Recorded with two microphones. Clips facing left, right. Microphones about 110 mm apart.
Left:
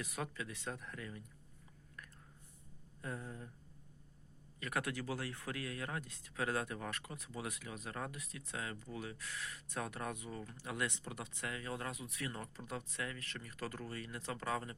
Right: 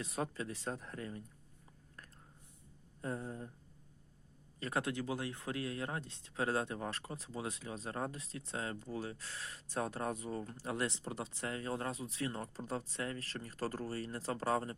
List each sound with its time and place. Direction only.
0.0 s speech: 30° right (ahead or behind)
2.0 s whispering: 35° right (ahead or behind)
3.0 s speech: 30° right (ahead or behind)
4.6 s speech: 25° right (ahead or behind)